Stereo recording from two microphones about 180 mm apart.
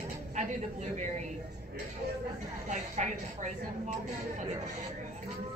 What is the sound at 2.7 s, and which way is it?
Speech, 40° right (ahead or behind).